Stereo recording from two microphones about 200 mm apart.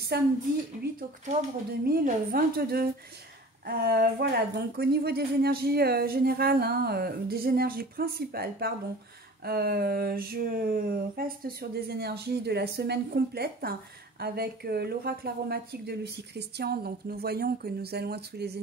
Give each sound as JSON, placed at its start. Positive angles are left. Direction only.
{"t": 1.9, "sound": "speech", "side_deg": -45}